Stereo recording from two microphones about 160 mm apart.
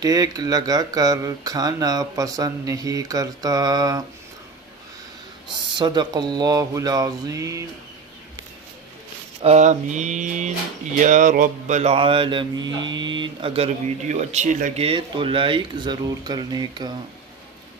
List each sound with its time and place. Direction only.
0.0 s speech: 20° right (ahead or behind)
5.8 s speech: 25° right (ahead or behind)
9.4 s mantra: 45° right (ahead or behind)
14.8 s speech: 35° right (ahead or behind)